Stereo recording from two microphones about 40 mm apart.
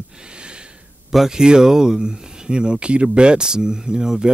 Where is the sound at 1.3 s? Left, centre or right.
Centre.